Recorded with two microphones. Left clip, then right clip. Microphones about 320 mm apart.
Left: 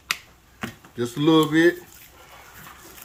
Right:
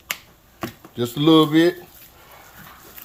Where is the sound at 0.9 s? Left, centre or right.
Right.